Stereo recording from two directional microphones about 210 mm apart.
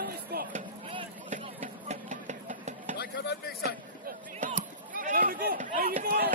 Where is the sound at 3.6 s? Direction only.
40° right (ahead or behind).